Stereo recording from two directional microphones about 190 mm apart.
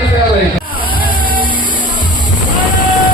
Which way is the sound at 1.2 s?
25° right (ahead or behind).